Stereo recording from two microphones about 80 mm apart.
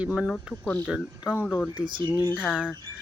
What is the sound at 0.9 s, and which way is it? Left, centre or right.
Speech, centre.